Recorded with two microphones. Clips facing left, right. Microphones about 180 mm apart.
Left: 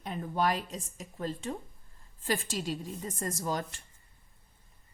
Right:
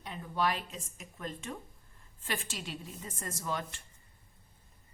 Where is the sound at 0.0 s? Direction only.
45° left (ahead or behind).